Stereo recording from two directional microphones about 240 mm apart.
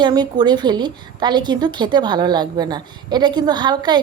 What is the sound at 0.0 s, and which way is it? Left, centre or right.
A woman's voice, centre.